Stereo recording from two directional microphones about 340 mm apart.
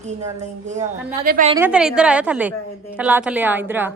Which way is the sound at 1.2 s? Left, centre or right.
Right.